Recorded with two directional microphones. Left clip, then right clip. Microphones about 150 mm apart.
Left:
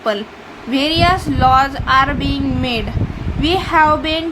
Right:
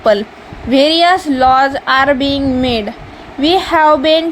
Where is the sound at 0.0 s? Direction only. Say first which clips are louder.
Right 8 dB; 45° right (ahead or behind).